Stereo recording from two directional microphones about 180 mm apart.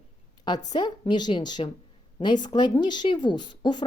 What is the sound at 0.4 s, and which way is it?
Speech, 25° left (ahead or behind).